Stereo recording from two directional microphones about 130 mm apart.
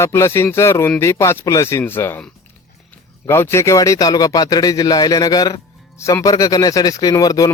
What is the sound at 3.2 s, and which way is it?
Speech, 20° left (ahead or behind).